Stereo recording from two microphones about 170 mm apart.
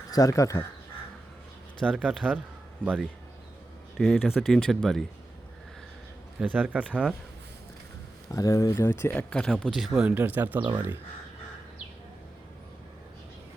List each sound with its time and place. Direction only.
0.1 s speech: 20° left (ahead or behind)
1.8 s speech: 5° left (ahead or behind)
2.0 s speech: 10° right (ahead or behind)
6.4 s speech: 10° right (ahead or behind)
8.3 s speech: 20° left (ahead or behind); by 10.7 s 10° right (ahead or behind)